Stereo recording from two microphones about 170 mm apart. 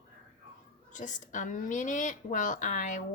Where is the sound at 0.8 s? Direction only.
45° left (ahead or behind).